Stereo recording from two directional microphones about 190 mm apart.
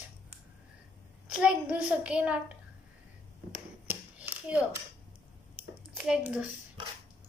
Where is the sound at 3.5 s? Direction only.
5° right (ahead or behind).